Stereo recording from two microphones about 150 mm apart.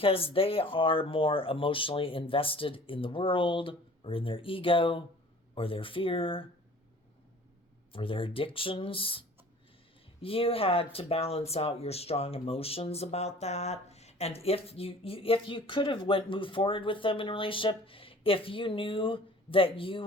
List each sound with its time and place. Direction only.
0.0 s speech: 40° left (ahead or behind)
7.9 s speech: 35° left (ahead or behind)